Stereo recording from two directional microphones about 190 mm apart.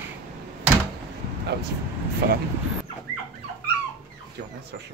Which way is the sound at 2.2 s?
55° right (ahead or behind).